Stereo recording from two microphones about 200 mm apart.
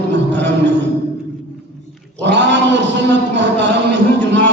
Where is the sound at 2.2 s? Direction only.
60° right (ahead or behind).